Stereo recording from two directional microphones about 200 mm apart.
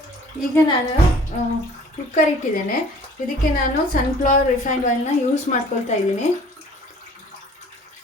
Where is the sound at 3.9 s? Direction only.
40° left (ahead or behind).